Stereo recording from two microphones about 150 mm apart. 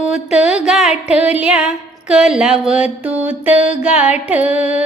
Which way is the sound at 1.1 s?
10° right (ahead or behind).